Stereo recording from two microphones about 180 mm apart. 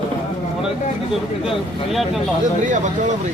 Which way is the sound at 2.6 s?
45° right (ahead or behind).